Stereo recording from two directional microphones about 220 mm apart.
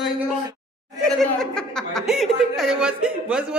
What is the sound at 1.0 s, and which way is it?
Speech, 5° left (ahead or behind).